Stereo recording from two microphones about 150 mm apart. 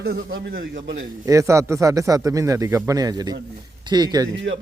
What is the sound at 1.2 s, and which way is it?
A man's voice, 20° right (ahead or behind).